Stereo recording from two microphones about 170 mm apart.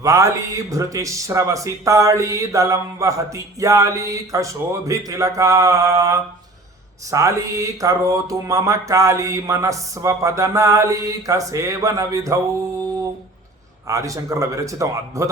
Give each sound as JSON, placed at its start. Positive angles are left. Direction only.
{"t": 0.0, "sound": "speech", "side_deg": -20}
{"t": 13.8, "sound": "speech", "side_deg": -20}